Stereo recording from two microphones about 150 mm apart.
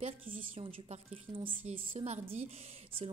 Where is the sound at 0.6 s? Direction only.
40° right (ahead or behind).